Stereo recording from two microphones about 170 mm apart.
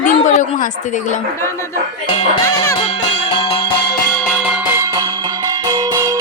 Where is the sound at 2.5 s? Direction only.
20° left (ahead or behind).